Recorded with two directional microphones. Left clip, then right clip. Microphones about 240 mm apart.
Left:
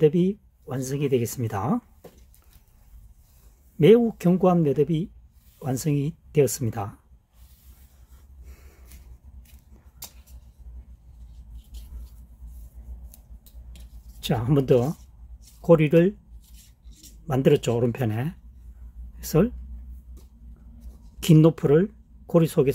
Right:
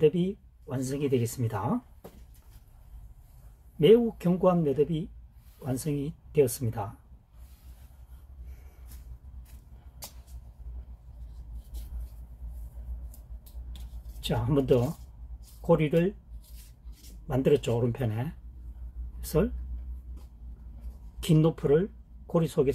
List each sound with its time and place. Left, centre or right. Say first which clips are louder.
0.0 s speech: left 4 dB; left
3.8 s speech: left 4 dB; left
14.2 s speech: left 4 dB; left
17.3 s speech: left 4 dB; left
21.2 s speech: left 7 dB; left